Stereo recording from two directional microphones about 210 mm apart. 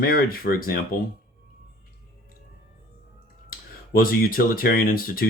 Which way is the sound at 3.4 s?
45° left (ahead or behind).